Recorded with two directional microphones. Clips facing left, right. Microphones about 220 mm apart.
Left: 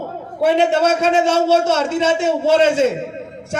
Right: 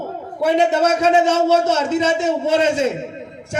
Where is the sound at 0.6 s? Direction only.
30° left (ahead or behind).